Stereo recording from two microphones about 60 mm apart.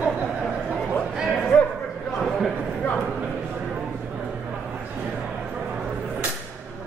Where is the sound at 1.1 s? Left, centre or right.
Centre.